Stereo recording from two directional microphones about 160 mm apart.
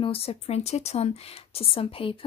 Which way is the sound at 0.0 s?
35° left (ahead or behind).